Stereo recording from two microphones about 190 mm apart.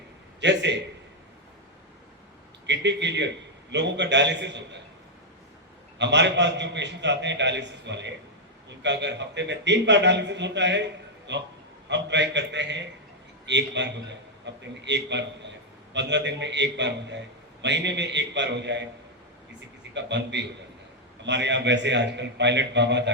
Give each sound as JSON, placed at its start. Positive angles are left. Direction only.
{"t": 0.3, "sound": "a man's voice", "side_deg": -65}
{"t": 2.6, "sound": "a man's voice", "side_deg": -65}
{"t": 6.0, "sound": "a man's voice", "side_deg": -65}
{"t": 19.9, "sound": "a man's voice", "side_deg": -65}